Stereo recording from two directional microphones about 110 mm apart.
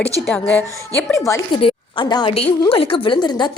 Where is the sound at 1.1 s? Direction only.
30° left (ahead or behind).